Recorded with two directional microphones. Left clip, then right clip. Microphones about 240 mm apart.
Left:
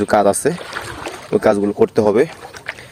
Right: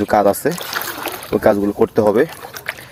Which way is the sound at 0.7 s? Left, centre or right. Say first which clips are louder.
Right 3 dB; right.